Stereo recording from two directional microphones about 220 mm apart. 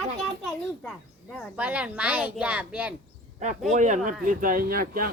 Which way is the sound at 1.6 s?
5° right (ahead or behind).